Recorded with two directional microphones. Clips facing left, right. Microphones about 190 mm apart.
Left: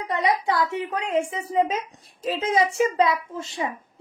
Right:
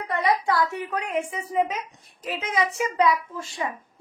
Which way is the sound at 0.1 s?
20° left (ahead or behind).